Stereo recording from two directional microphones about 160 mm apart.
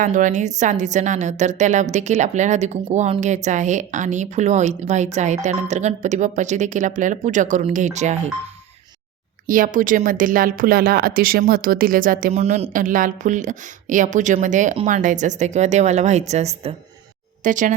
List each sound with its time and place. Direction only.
0.0 s a woman's voice: 55° right (ahead or behind)
9.5 s a woman's voice: 55° right (ahead or behind)
17.4 s a woman's voice: 55° right (ahead or behind)